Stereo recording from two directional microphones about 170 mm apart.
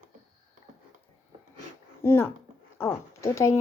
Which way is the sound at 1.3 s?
35° right (ahead or behind).